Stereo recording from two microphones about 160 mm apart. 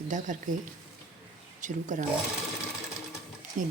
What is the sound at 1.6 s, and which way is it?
Speech, 50° right (ahead or behind).